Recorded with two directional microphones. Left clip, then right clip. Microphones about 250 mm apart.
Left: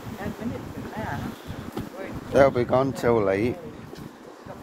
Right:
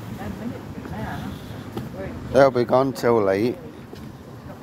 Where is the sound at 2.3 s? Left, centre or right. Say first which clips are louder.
Right 3 dB; centre.